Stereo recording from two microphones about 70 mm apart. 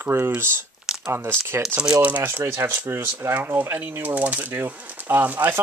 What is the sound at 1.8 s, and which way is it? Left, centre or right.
Speech, centre.